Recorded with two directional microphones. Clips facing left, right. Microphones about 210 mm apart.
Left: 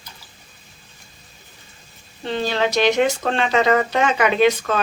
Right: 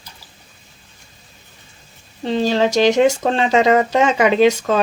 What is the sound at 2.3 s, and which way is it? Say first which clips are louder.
Speech: right 5 dB; 35° right (ahead or behind).